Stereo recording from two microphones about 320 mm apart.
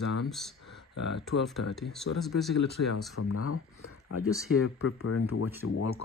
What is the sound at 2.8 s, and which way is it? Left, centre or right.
Speech, left.